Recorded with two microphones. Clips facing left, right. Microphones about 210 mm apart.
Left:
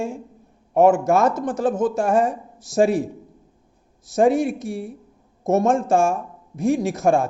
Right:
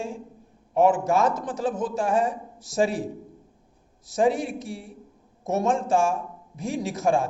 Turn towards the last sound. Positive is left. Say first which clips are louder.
# left 4 dB
turn(degrees=50)  # may be behind; listen again after turning